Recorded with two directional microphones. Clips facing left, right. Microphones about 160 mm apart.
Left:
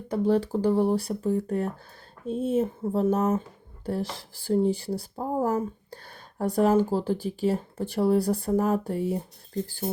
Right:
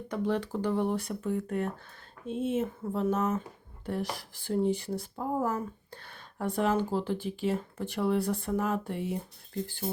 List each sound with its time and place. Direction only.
0.1 s speech: 35° left (ahead or behind)